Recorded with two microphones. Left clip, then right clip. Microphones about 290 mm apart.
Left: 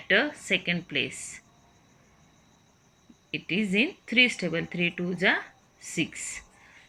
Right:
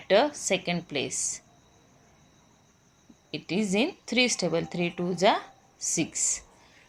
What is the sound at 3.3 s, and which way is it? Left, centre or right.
A woman's voice, centre.